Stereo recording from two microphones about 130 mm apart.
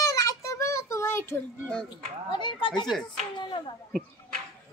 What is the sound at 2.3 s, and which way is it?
Speech, 35° left (ahead or behind).